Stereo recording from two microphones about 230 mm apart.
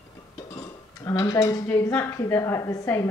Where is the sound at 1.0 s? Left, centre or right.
Centre.